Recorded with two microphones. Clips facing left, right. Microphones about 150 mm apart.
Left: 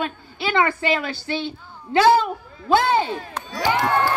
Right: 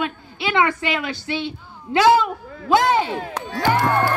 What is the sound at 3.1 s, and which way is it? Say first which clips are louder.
Speech: right 3 dB; 80° right.